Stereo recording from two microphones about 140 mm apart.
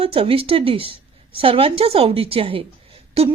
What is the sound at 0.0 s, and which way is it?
A woman's voice, 40° right (ahead or behind).